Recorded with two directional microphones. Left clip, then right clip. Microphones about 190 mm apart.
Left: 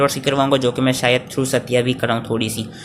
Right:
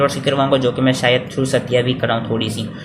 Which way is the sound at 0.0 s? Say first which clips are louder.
Right 1 dB; 30° left (ahead or behind).